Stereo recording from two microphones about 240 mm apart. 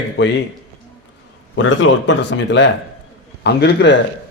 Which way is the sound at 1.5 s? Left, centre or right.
Left.